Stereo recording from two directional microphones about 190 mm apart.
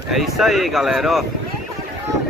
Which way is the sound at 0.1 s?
Centre (ahead or behind).